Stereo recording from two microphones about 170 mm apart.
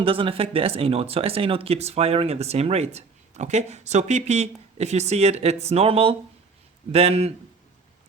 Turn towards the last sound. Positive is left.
turn(degrees=-35)  # may be behind; listen again after turning